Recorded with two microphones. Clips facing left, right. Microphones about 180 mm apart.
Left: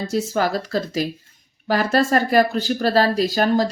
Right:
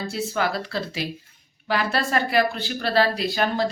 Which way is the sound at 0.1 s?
40° left (ahead or behind).